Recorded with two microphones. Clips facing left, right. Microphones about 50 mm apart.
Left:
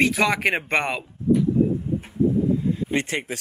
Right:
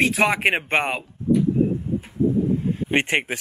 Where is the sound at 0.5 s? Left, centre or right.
Right.